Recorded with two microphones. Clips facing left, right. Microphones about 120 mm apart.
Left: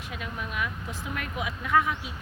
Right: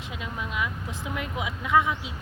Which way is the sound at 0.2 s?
20° right (ahead or behind).